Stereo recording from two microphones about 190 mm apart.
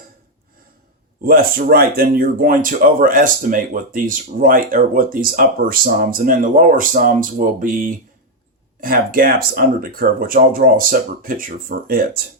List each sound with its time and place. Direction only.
1.2 s speech: 50° right (ahead or behind)